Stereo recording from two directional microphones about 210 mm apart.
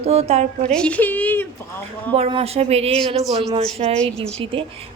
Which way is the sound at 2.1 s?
25° right (ahead or behind).